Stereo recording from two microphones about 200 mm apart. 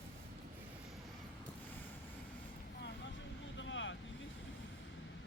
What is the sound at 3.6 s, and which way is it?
Vehicle, 70° left (ahead or behind).